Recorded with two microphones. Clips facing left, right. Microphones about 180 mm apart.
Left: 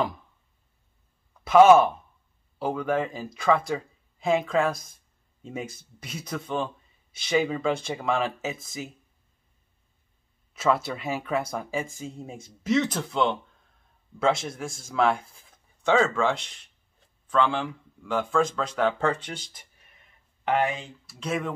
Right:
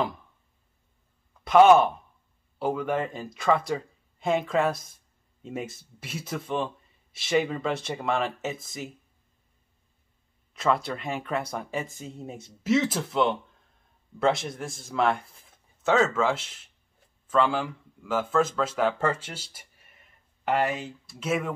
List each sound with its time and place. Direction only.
1.4 s a man's voice: centre (ahead or behind)
10.5 s speech: 5° left (ahead or behind)